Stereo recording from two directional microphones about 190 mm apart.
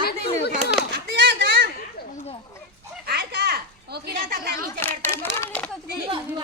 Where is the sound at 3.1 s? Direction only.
60° right (ahead or behind).